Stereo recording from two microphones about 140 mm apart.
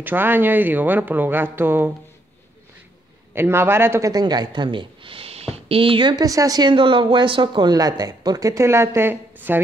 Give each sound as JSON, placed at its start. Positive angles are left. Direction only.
{"t": 0.0, "sound": "speech", "side_deg": -15}
{"t": 3.3, "sound": "speech", "side_deg": -15}